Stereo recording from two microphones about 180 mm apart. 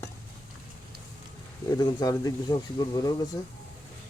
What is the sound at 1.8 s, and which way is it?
Speech, 20° left (ahead or behind).